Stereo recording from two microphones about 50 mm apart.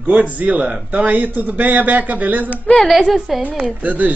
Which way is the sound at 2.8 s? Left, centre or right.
Centre.